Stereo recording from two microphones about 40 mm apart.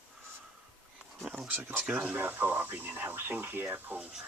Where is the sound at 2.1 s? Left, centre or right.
Right.